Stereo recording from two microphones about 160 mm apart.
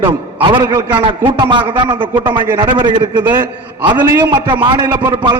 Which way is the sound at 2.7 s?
30° right (ahead or behind).